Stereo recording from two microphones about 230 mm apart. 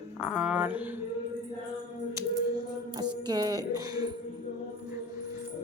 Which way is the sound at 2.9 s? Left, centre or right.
Centre.